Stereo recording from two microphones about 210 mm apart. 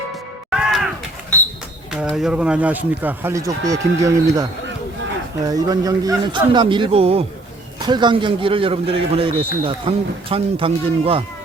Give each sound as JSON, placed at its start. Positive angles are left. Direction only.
{"t": 0.5, "sound": "a sound", "side_deg": 0}
{"t": 1.9, "sound": "speech", "side_deg": 0}
{"t": 5.5, "sound": "a man's voice", "side_deg": -20}